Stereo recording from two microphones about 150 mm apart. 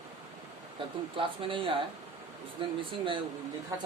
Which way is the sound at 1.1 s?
35° right (ahead or behind).